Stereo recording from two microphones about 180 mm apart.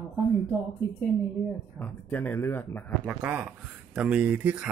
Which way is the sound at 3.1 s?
5° right (ahead or behind).